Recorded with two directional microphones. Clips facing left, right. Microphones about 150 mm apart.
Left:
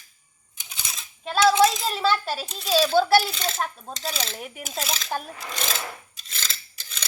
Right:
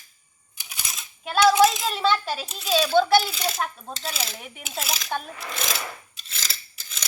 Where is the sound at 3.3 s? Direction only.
10° right (ahead or behind).